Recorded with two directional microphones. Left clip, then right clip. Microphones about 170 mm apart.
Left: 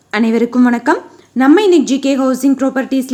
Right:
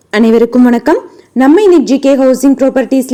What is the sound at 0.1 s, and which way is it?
A woman's voice, 25° right (ahead or behind).